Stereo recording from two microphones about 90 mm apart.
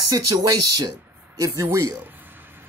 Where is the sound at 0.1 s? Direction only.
45° right (ahead or behind).